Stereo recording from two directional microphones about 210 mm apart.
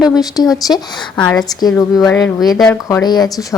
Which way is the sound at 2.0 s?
15° left (ahead or behind).